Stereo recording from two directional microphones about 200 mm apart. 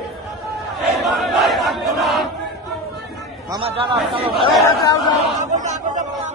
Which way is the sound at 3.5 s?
25° right (ahead or behind).